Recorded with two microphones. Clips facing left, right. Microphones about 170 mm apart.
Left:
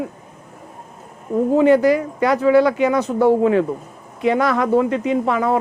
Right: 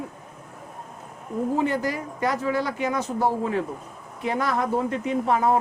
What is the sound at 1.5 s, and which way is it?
Speech, 75° left (ahead or behind).